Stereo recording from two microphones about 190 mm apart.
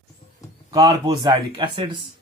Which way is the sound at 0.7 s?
20° right (ahead or behind).